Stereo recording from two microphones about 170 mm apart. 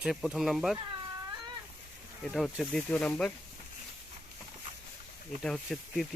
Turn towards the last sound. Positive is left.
turn(degrees=5)  # may be behind; listen again after turning